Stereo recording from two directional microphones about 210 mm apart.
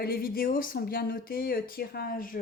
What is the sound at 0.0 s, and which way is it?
Speech, 45° left (ahead or behind).